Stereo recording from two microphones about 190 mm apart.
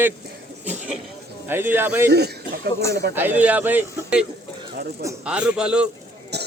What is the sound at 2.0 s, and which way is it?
A man's voice, 55° right (ahead or behind).